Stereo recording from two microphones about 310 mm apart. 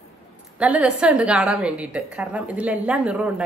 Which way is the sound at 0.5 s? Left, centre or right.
Centre.